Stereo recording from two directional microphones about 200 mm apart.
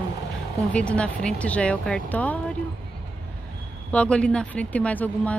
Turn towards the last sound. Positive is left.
turn(degrees=10)  # may be behind; listen again after turning